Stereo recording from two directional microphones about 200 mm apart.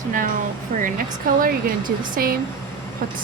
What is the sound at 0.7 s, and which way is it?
Speech, 40° right (ahead or behind).